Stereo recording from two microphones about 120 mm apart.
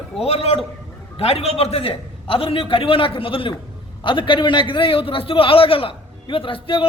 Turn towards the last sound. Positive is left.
turn(degrees=45)  # may be behind; listen again after turning